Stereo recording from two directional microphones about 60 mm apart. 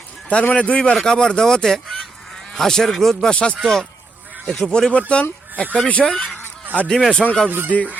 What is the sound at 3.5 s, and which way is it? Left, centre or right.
Speech, centre.